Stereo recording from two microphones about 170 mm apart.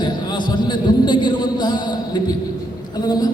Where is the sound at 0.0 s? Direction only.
25° left (ahead or behind).